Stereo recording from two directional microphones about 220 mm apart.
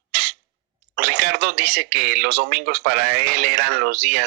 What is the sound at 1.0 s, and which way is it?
Speech, 45° right (ahead or behind).